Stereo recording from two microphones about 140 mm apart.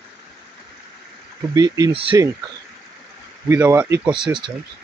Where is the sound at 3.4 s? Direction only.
15° right (ahead or behind).